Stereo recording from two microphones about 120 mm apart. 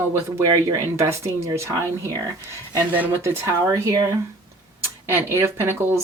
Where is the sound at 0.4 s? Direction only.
30° right (ahead or behind).